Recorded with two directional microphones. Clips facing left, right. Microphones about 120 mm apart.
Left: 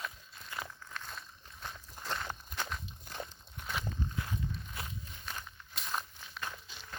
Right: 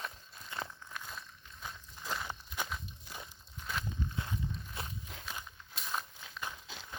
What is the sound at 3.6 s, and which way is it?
Walk, 60° left (ahead or behind).